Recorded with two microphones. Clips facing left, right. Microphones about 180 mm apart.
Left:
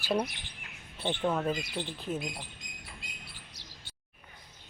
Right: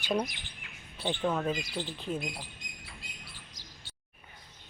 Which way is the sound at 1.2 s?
5° left (ahead or behind).